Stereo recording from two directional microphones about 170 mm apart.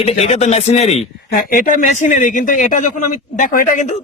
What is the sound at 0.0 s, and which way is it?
Speech, 40° left (ahead or behind).